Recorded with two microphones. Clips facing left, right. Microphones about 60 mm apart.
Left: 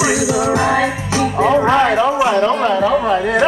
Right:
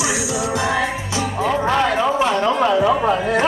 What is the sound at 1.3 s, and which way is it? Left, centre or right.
Speech, left.